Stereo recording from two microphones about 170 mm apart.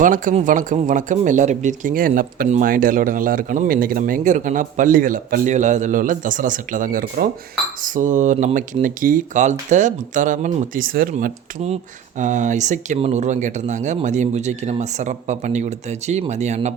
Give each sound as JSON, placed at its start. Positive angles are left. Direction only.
{"t": 0.0, "sound": "speech", "side_deg": -50}